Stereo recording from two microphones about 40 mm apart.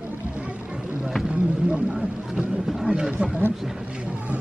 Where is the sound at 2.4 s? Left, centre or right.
Right.